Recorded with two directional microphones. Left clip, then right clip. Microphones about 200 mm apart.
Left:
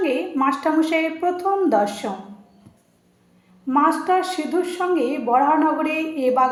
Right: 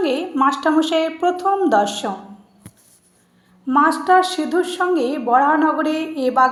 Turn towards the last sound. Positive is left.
turn(degrees=-25)  # may be behind; listen again after turning